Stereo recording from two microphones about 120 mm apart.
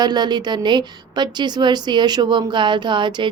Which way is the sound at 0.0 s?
35° right (ahead or behind).